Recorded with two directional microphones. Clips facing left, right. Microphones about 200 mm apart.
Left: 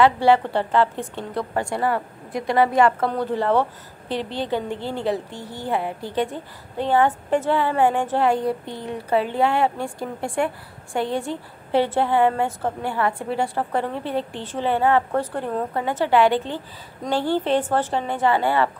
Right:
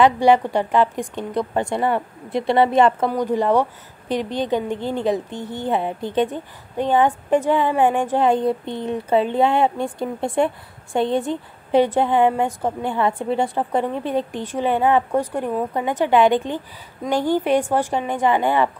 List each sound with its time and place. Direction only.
0.0 s a woman's voice: 15° right (ahead or behind)